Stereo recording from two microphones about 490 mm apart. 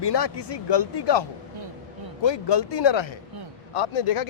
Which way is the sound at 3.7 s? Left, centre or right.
Left.